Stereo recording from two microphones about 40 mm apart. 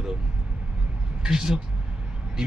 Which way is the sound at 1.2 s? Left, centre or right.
Centre.